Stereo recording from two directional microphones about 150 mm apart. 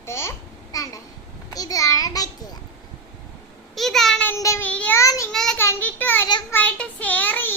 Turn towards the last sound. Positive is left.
turn(degrees=15)  # may be behind; listen again after turning